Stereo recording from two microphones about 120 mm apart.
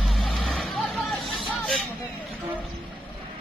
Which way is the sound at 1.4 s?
10° left (ahead or behind).